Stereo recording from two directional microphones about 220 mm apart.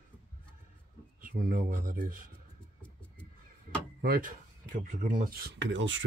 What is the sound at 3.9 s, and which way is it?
Speech, 45° right (ahead or behind).